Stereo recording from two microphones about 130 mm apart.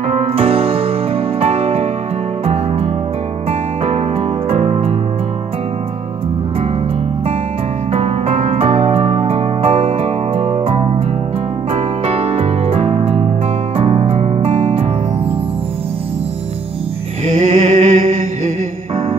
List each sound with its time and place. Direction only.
0.1 s music: 50° right (ahead or behind)
4.5 s music: 50° right (ahead or behind)
7.9 s music: 50° right (ahead or behind)
17.3 s music: 75° right (ahead or behind)